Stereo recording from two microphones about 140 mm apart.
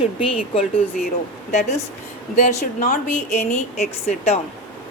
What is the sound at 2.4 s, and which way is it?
A woman's voice, 55° left (ahead or behind).